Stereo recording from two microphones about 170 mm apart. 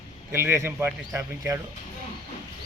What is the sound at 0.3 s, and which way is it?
Speech, 15° right (ahead or behind).